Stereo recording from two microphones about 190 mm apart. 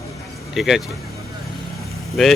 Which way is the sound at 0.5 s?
Centre (ahead or behind).